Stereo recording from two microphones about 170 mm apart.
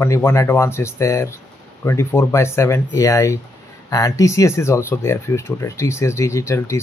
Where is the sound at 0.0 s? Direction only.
15° left (ahead or behind).